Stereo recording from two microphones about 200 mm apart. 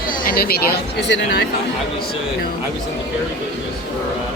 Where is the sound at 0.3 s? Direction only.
50° left (ahead or behind).